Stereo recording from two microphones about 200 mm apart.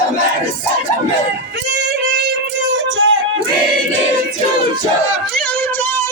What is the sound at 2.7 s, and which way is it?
Music, 75° right (ahead or behind).